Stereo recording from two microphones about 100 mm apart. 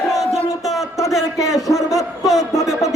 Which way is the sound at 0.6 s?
5° right (ahead or behind).